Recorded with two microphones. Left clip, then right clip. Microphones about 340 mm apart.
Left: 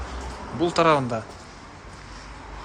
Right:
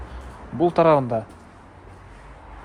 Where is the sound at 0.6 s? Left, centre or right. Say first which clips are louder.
Right 3 dB; centre.